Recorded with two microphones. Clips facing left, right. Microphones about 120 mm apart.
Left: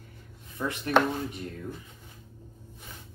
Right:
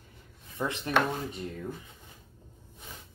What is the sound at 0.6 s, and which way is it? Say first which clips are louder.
Speech: left 1 dB; 25° right (ahead or behind).